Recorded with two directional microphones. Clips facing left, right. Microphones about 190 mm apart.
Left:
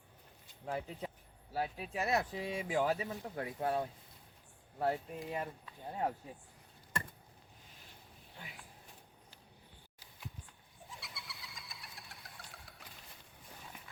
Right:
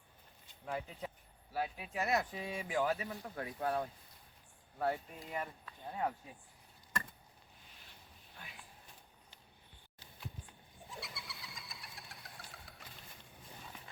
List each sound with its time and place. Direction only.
0.6 s speech: 25° left (ahead or behind)
10.8 s vehicle: centre (ahead or behind)